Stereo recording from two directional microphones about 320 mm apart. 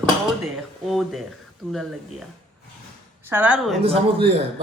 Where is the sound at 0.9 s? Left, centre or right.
Centre.